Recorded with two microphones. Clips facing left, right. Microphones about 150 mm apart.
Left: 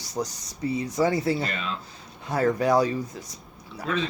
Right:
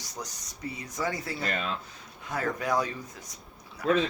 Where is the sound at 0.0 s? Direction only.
30° left (ahead or behind).